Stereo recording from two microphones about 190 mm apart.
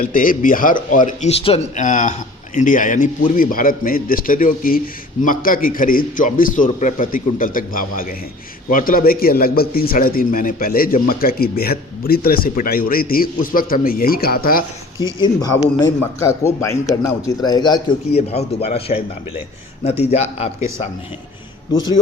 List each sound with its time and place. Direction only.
0.0 s a man's voice: 45° left (ahead or behind)
15.2 s a man's voice: 20° left (ahead or behind)
21.8 s a man's voice: 20° left (ahead or behind)